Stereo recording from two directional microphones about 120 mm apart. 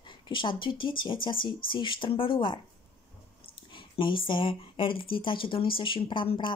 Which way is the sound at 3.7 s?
45° left (ahead or behind).